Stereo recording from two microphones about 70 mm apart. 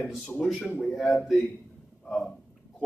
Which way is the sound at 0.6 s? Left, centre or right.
Left.